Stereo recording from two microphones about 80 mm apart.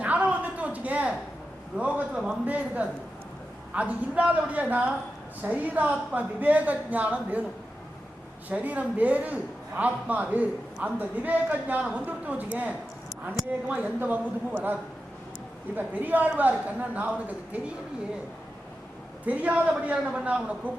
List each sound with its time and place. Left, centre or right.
0.0 s a sound: centre
1.7 s a woman's voice: centre
8.4 s a woman's voice: centre
19.2 s a woman's voice: centre